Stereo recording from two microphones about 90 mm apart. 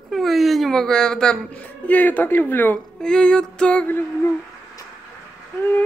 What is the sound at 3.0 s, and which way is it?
Speech, 10° left (ahead or behind).